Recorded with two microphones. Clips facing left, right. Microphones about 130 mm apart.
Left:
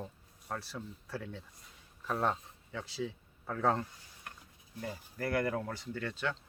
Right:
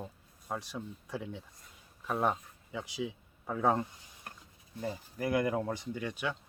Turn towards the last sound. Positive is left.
turn(degrees=-15)  # may be behind; listen again after turning